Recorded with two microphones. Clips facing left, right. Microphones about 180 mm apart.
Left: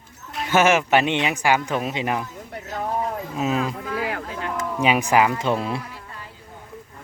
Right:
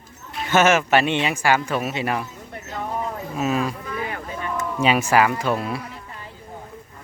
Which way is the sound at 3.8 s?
90° left.